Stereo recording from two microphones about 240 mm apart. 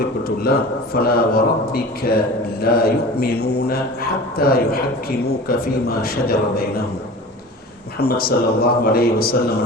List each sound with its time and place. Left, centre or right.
0.9 s a man's voice: left
7.9 s a man's voice: left